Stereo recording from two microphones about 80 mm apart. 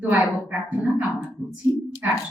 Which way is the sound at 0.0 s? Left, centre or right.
Centre.